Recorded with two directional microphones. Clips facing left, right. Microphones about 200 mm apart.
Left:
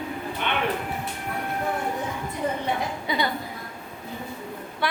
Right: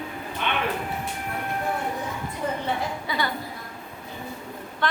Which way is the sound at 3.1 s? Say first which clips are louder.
Left 3 dB; 15° left (ahead or behind).